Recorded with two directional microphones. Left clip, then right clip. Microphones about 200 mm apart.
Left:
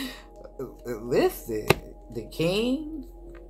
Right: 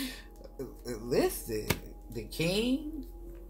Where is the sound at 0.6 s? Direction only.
20° right (ahead or behind).